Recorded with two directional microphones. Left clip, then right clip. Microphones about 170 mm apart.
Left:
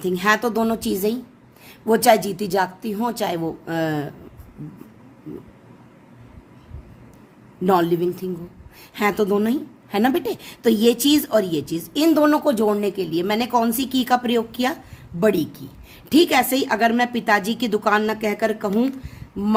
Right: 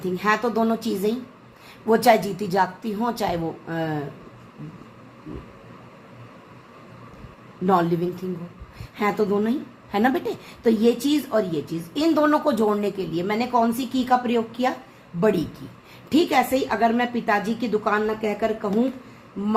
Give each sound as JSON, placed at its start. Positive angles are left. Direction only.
{"t": 0.0, "sound": "a woman's voice", "side_deg": 40}
{"t": 7.6, "sound": "a woman's voice", "side_deg": 40}